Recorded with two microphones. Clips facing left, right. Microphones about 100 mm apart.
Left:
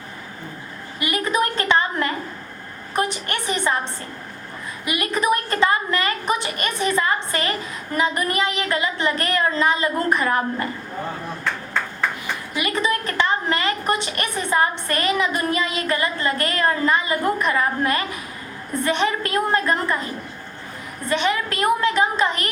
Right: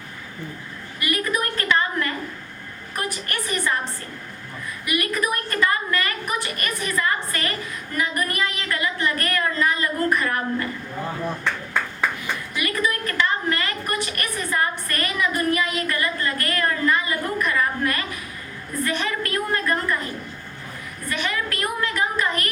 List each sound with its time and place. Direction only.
0.9 s a sound: 20° left (ahead or behind)
2.9 s a woman's voice: 25° left (ahead or behind)
4.9 s a woman's voice: 25° left (ahead or behind)
12.5 s a woman's voice: 20° left (ahead or behind)
21.1 s a woman's voice: 25° left (ahead or behind)